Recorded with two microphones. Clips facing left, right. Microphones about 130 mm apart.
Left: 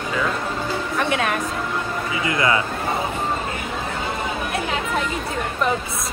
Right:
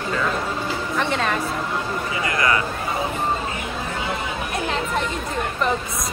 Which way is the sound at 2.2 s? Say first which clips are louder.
Left 2 dB; 25° left (ahead or behind).